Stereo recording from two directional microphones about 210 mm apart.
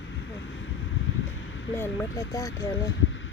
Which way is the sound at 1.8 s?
15° left (ahead or behind).